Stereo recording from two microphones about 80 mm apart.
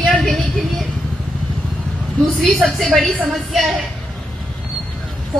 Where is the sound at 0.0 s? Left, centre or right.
Centre.